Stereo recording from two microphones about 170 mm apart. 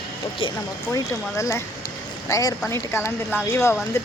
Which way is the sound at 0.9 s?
20° left (ahead or behind).